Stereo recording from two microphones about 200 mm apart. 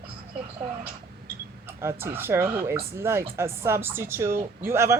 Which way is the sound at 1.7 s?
10° right (ahead or behind).